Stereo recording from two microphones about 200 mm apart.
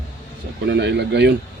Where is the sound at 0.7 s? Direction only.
60° right (ahead or behind).